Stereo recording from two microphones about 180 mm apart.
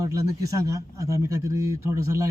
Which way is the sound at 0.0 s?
20° right (ahead or behind).